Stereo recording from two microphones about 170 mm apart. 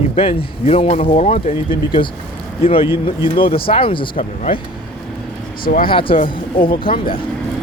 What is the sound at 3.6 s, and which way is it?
Speech, 30° left (ahead or behind).